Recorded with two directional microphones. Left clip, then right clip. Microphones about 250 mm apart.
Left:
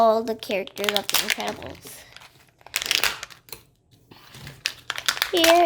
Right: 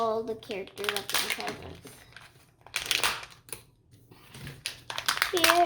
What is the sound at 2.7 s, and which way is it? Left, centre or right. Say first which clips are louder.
Crumpling: left 5 dB; left.